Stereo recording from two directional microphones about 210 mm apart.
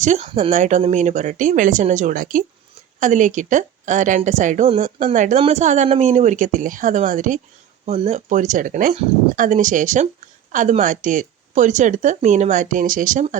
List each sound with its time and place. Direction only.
0.0 s a woman's voice: 30° right (ahead or behind)